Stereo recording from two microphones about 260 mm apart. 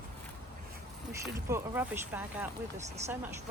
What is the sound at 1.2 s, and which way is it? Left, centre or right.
Speech, centre.